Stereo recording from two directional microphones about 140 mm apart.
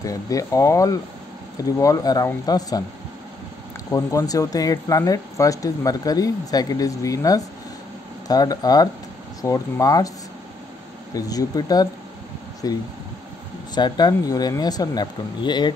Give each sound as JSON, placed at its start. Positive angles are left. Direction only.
{"t": 0.0, "sound": "speech", "side_deg": 25}
{"t": 3.9, "sound": "speech", "side_deg": 25}
{"t": 11.1, "sound": "speech", "side_deg": 25}